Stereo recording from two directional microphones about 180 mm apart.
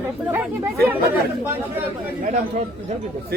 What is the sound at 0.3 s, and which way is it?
Speech, 10° right (ahead or behind).